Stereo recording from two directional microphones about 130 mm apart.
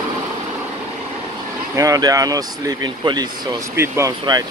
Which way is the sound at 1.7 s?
25° right (ahead or behind).